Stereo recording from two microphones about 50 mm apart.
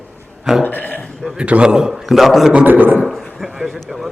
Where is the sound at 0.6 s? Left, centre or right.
Left.